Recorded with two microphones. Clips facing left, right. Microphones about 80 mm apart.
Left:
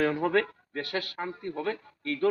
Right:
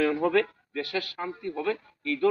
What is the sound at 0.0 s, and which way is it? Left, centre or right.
Speech, left.